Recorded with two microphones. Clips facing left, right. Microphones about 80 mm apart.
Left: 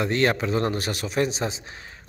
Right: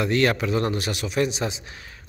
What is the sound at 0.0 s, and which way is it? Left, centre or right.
A man's voice, left.